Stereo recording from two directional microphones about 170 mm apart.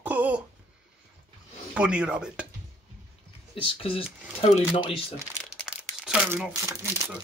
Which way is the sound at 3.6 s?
30° left (ahead or behind).